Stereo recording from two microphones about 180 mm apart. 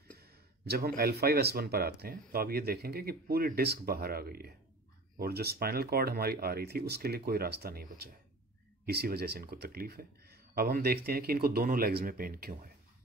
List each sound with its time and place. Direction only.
0.2 s speech: 60° right (ahead or behind)